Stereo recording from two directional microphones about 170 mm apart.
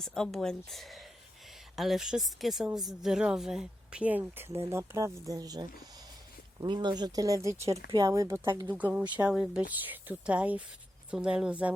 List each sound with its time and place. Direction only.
0.0 s a woman's voice: 5° left (ahead or behind)